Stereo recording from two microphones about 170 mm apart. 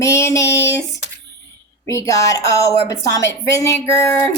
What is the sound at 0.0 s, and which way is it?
Child singing, 15° left (ahead or behind).